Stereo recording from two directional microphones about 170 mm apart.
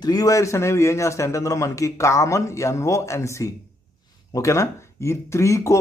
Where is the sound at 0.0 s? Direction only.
20° left (ahead or behind).